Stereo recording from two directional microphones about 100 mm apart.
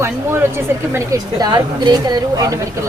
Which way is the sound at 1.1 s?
40° right (ahead or behind).